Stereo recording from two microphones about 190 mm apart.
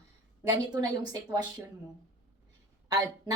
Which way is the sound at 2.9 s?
20° right (ahead or behind).